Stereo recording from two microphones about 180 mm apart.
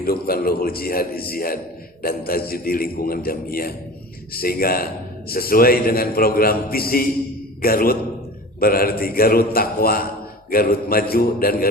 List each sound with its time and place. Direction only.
0.0 s a man's voice: 55° left (ahead or behind)